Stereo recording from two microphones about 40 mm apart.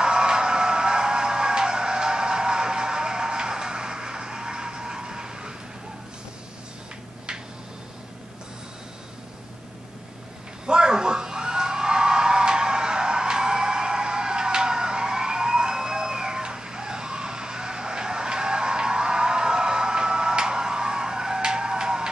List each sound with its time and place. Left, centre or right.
0.0 s music: centre
10.7 s music: centre